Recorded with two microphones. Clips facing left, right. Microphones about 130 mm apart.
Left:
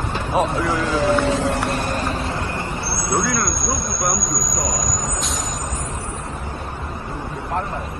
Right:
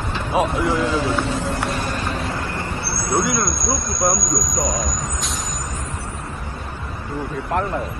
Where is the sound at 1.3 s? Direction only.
75° left (ahead or behind); by 3.2 s 15° left (ahead or behind).